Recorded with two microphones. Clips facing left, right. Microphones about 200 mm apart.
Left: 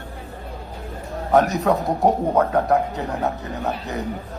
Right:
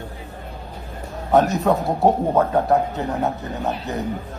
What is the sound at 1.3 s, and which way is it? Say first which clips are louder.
A man's voice: right 1 dB; centre (ahead or behind).